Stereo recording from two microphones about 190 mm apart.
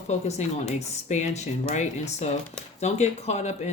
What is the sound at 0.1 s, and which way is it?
Speech, 35° left (ahead or behind).